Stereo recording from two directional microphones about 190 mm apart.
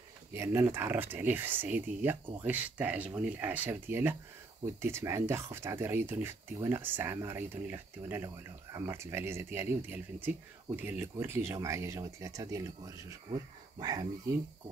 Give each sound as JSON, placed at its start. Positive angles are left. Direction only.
{"t": 0.3, "sound": "speech", "side_deg": -15}